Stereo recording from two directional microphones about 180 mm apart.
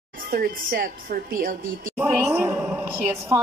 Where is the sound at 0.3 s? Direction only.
55° right (ahead or behind).